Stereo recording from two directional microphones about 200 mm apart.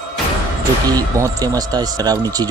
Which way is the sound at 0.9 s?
20° right (ahead or behind).